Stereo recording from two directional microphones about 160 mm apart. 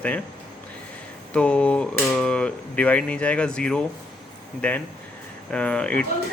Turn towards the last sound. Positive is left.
turn(degrees=5)  # may be behind; listen again after turning